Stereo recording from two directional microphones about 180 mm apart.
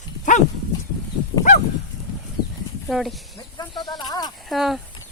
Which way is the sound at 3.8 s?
25° left (ahead or behind).